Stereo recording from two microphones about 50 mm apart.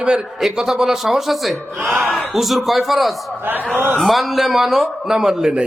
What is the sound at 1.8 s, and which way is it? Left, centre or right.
Speech, right.